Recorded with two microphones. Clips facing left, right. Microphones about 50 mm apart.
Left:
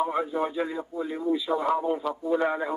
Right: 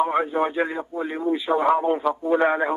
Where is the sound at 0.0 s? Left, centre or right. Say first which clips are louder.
Right 5 dB; right.